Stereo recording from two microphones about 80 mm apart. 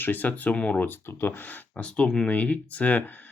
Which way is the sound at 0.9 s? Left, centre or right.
Left.